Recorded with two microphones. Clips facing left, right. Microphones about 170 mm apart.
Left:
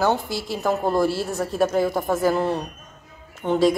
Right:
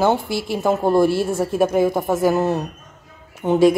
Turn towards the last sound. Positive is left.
turn(degrees=-10)  # may be behind; listen again after turning